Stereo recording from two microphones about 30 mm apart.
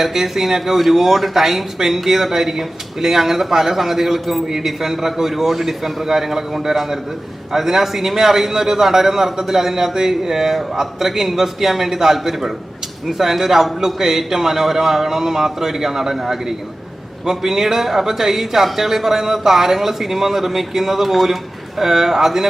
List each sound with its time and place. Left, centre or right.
0.0 s a man's voice: centre